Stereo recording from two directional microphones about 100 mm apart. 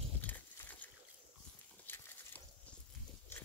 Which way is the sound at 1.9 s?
20° left (ahead or behind).